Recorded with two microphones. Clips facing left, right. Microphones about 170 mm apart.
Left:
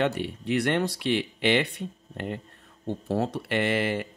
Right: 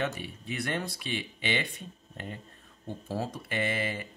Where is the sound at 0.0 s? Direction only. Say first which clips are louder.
Left 7 dB; 70° left (ahead or behind).